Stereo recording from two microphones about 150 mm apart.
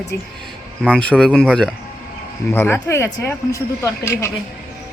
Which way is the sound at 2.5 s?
15° left (ahead or behind).